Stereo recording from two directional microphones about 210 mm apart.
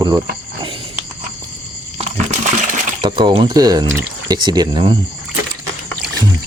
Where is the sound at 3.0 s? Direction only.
20° right (ahead or behind).